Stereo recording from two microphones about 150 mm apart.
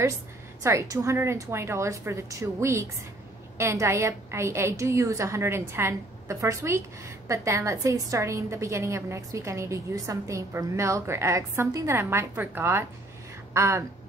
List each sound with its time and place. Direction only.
0.7 s a woman's voice: 20° right (ahead or behind)